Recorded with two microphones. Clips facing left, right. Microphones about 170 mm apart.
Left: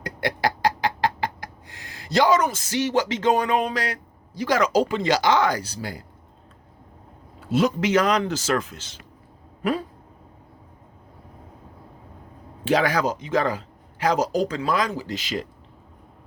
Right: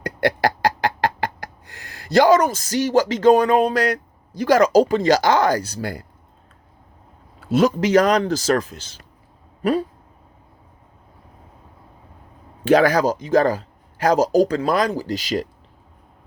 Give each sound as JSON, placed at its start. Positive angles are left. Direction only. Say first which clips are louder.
{"t": 0.0, "sound": "a sound", "louder": "right 5 dB", "side_deg": -55}
{"t": 7.5, "sound": "speech", "louder": "right 4 dB", "side_deg": -40}
{"t": 12.6, "sound": "speech", "louder": "right 6 dB", "side_deg": -45}